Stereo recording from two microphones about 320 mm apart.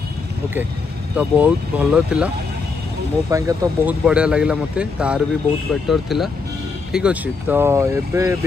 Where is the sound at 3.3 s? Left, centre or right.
Centre.